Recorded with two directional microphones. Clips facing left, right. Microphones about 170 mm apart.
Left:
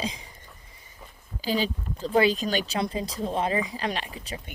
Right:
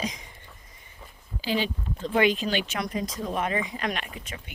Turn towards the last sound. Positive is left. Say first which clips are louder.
# left 1 dB
turn(degrees=35)  # may be behind; listen again after turning